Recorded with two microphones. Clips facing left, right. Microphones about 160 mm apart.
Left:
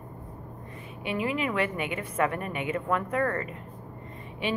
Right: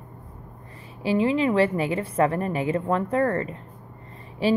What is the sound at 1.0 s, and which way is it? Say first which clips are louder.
A woman's voice: right 8 dB; 30° right (ahead or behind).